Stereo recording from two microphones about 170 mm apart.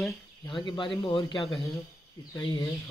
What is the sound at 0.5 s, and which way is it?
A man's voice, 30° left (ahead or behind).